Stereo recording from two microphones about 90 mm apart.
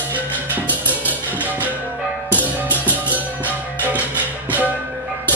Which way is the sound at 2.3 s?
20° right (ahead or behind).